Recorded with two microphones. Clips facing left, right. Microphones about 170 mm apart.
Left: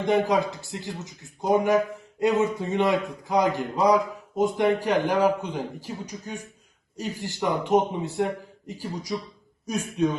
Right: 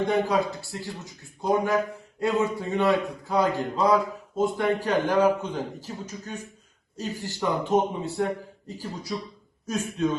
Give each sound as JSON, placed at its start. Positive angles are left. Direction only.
{"t": 0.0, "sound": "a man's voice", "side_deg": 15}